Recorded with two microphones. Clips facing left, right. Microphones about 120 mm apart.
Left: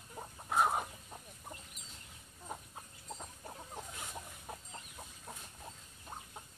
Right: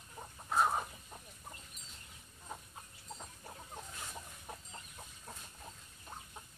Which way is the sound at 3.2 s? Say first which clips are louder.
Left 2 dB; 10° left (ahead or behind).